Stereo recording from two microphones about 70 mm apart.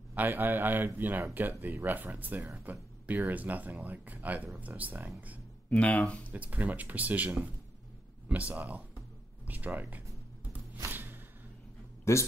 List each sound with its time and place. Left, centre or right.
0.1 s speech: right
5.7 s speech: centre
6.3 s speech: right
10.9 s music: right
12.0 s speech: left